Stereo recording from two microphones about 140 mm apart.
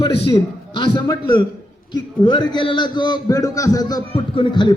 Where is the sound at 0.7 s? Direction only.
35° left (ahead or behind).